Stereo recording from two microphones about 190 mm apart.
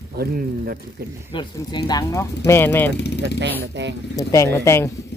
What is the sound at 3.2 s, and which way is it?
Speech, 70° right (ahead or behind).